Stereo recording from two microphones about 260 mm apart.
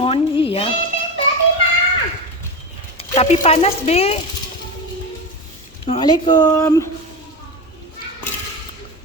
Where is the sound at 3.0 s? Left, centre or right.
Left.